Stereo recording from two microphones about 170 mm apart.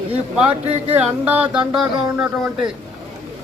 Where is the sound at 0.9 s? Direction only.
10° right (ahead or behind).